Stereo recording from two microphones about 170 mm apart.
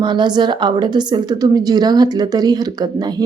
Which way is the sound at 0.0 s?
25° right (ahead or behind).